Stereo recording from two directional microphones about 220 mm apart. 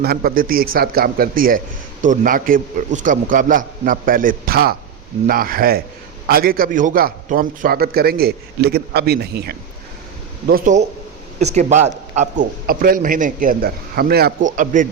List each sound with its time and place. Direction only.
0.0 s a man's voice: 45° right (ahead or behind)